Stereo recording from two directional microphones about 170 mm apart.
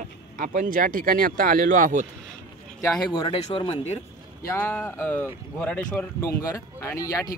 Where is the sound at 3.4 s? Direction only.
35° left (ahead or behind).